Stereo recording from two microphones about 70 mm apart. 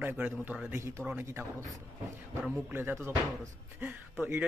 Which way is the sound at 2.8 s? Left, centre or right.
Right.